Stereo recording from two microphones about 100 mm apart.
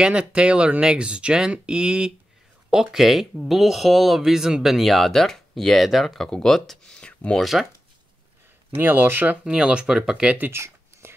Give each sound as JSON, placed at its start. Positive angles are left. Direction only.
{"t": 0.0, "sound": "speech", "side_deg": -10}
{"t": 8.7, "sound": "speech", "side_deg": -20}
{"t": 10.5, "sound": "a sound", "side_deg": -25}